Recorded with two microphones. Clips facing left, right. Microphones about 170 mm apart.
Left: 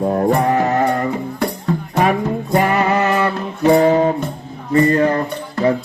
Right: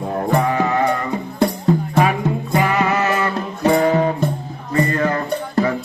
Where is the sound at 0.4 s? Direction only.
45° left (ahead or behind).